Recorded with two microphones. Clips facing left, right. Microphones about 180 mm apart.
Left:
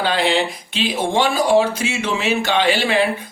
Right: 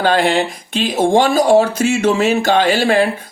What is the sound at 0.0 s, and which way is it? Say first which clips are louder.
Speech: right 4 dB; 50° right (ahead or behind).